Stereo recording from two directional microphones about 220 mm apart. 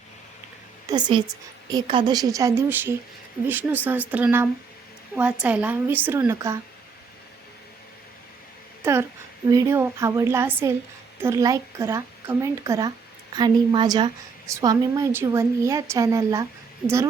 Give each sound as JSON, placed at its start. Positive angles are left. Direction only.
{"t": 0.9, "sound": "a woman's voice", "side_deg": -20}
{"t": 8.8, "sound": "a woman's voice", "side_deg": -10}